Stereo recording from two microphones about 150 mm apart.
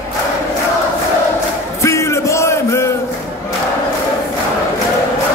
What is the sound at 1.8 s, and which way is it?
Music, 20° left (ahead or behind).